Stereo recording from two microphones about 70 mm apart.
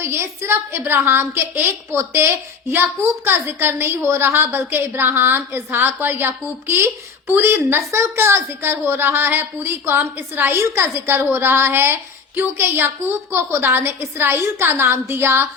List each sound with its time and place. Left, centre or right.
0.0 s a woman's voice: right
7.8 s a woman's voice: right